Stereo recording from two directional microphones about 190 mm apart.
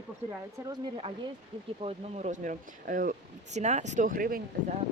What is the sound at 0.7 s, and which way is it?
Speech, 30° right (ahead or behind).